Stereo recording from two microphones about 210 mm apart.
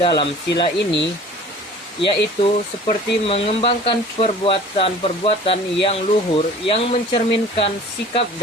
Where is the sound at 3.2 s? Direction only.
25° left (ahead or behind).